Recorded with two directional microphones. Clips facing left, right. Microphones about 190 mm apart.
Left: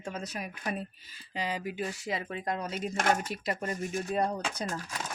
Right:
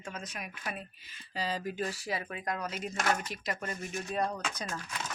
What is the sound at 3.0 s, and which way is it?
Speech, 50° left (ahead or behind).